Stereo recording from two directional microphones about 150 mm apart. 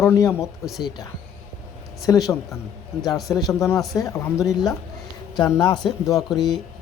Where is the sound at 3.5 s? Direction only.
20° left (ahead or behind).